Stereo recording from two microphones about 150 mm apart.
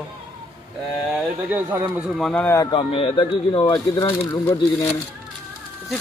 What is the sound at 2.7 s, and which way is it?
A man's voice, 35° left (ahead or behind).